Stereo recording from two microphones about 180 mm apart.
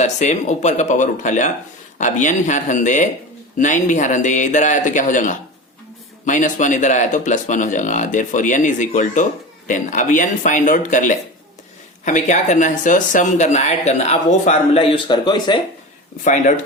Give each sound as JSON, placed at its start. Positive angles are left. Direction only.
{"t": 0.0, "sound": "speech", "side_deg": 40}
{"t": 16.2, "sound": "speech", "side_deg": 45}